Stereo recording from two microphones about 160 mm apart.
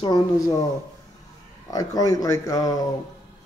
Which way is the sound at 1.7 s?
25° left (ahead or behind).